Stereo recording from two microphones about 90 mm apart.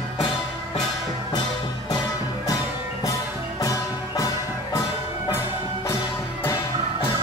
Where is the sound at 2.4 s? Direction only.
45° left (ahead or behind).